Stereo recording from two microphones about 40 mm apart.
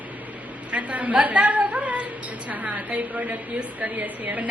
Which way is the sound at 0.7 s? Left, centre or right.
Right.